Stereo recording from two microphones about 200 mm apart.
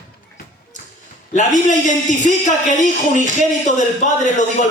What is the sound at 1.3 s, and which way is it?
Speech, 40° left (ahead or behind).